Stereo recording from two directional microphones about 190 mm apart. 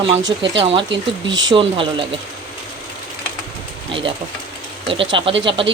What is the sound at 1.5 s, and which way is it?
Speech, 25° right (ahead or behind).